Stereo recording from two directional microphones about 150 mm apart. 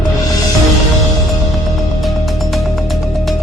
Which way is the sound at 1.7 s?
Centre (ahead or behind).